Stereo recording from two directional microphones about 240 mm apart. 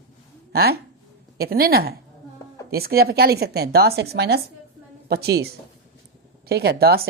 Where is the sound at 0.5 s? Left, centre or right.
Right.